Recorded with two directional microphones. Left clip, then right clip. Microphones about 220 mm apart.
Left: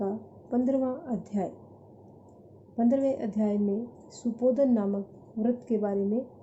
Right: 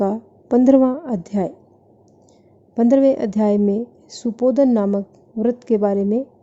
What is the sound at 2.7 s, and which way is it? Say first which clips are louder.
A woman's voice: right 12 dB; 45° right (ahead or behind).